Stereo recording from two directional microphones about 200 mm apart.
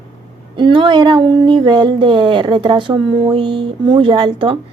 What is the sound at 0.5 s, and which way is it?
Speech, 25° right (ahead or behind).